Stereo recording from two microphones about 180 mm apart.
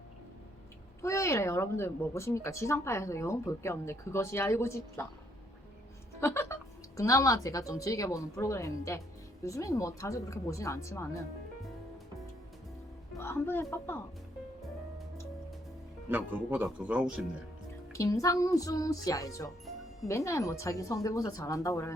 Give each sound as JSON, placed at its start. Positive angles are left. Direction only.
{"t": 1.0, "sound": "speech", "side_deg": 15}
{"t": 6.1, "sound": "a woman's voice", "side_deg": 15}
{"t": 13.1, "sound": "speech", "side_deg": 15}
{"t": 16.0, "sound": "speech", "side_deg": -10}
{"t": 17.9, "sound": "speech", "side_deg": 15}